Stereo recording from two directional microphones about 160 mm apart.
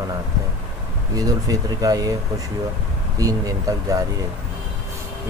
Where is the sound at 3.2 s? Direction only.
20° right (ahead or behind).